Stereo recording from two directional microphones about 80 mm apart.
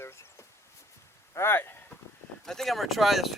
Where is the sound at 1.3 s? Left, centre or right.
Left.